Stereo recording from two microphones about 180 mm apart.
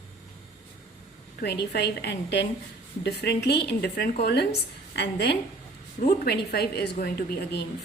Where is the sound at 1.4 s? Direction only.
65° left (ahead or behind).